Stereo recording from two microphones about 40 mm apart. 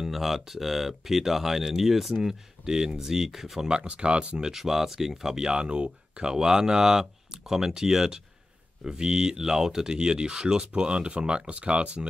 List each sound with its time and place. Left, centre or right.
0.0 s speech: centre
3.6 s speech: right
4.4 s speech: centre